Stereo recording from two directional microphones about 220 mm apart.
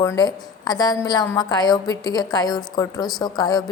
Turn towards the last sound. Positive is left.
turn(degrees=15)  # may be behind; listen again after turning